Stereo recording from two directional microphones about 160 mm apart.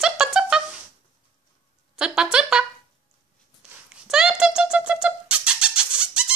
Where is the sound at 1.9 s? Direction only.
5° right (ahead or behind).